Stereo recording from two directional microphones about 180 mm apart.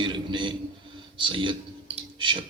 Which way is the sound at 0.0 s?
25° right (ahead or behind).